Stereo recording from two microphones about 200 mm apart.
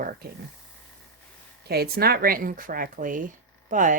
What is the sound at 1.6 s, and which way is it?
Speech, 50° right (ahead or behind).